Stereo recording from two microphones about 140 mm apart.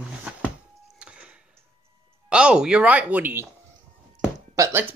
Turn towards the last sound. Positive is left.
turn(degrees=-25)  # may be behind; listen again after turning